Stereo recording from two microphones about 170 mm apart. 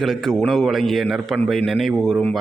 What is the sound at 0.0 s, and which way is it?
A man's voice, centre (ahead or behind).